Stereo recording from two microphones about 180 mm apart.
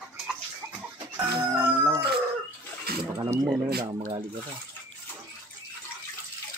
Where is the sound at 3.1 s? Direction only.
20° right (ahead or behind).